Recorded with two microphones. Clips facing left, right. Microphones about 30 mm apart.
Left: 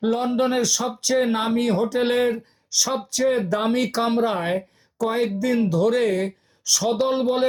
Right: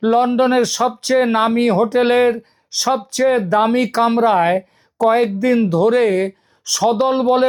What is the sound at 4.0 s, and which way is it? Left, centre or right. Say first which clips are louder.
Speech: right 11 dB; right.